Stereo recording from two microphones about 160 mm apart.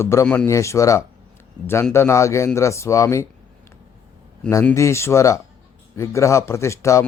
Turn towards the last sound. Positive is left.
turn(degrees=20)  # may be behind; listen again after turning